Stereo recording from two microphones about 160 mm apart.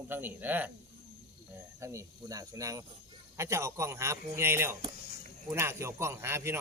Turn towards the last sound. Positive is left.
turn(degrees=-15)  # may be behind; listen again after turning